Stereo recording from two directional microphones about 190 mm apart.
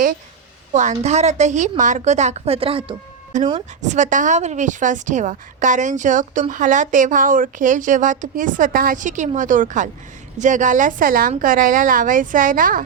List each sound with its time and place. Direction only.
0.7 s a woman's voice: 40° right (ahead or behind)
3.3 s a woman's voice: 40° right (ahead or behind)